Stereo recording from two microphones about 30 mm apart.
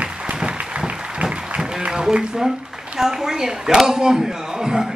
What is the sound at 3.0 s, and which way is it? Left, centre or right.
A woman's voice, centre.